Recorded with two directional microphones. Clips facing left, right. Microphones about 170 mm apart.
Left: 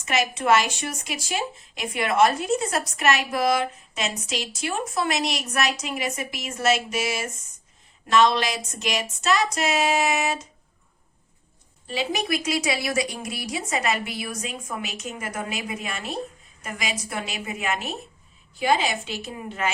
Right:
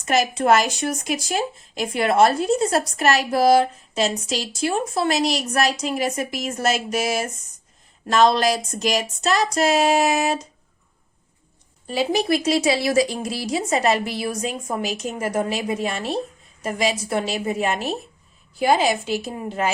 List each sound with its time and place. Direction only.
0.0 s speech: 40° right (ahead or behind)
11.9 s speech: 35° right (ahead or behind)